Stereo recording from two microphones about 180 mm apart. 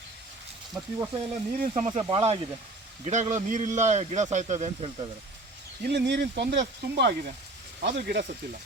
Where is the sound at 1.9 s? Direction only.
30° right (ahead or behind).